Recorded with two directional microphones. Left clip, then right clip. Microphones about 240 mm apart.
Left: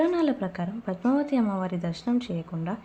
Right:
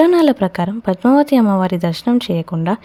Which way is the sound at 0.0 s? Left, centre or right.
Right.